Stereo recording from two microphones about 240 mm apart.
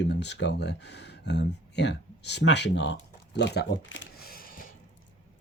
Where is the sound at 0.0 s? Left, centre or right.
Left.